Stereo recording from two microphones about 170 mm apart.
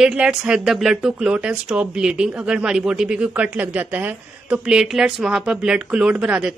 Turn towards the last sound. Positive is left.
turn(degrees=-5)  # may be behind; listen again after turning